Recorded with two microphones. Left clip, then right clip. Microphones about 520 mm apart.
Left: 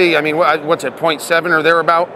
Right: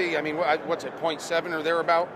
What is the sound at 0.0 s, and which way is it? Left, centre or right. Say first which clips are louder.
Speech: left 13 dB; left.